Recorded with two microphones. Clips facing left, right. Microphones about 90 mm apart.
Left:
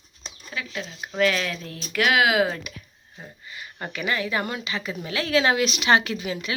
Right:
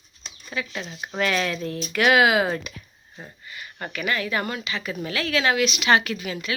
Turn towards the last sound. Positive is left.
turn(degrees=20)  # may be behind; listen again after turning